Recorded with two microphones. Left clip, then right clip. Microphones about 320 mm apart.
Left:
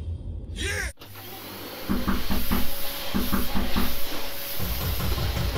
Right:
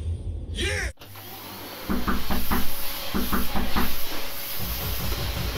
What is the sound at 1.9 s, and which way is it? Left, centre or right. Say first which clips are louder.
Cupboard open or close: right 2 dB; centre.